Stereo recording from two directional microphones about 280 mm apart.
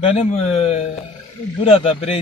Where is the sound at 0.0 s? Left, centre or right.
Left.